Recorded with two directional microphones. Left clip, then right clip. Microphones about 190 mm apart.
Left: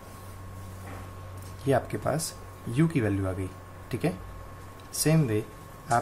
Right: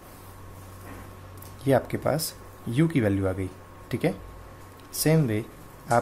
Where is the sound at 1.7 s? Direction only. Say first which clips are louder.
Right 3 dB; 25° right (ahead or behind).